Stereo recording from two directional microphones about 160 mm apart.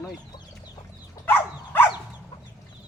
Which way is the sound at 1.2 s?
10° left (ahead or behind).